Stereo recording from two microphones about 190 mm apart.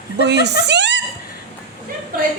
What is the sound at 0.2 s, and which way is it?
Speech, 65° right (ahead or behind).